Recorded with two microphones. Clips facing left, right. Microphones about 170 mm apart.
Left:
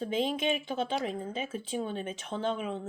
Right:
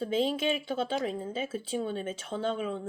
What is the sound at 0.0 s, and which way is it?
Speech, 35° right (ahead or behind).